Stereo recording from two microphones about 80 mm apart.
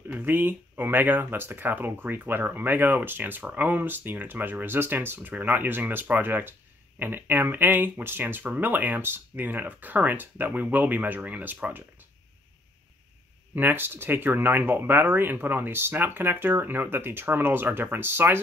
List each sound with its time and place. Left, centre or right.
0.1 s speech: right
13.6 s speech: right